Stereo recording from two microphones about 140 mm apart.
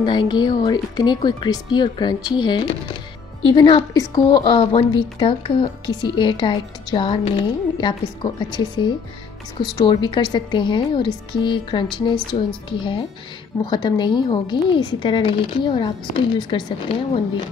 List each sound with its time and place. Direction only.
0.0 s a woman's voice: 30° left (ahead or behind)
4.4 s a woman's voice: 40° left (ahead or behind)